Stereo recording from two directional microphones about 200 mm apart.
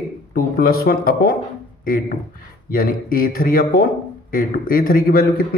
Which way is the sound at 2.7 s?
45° left (ahead or behind).